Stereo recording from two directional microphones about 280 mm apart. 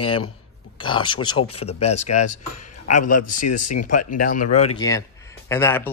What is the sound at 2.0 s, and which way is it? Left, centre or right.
Speech, left.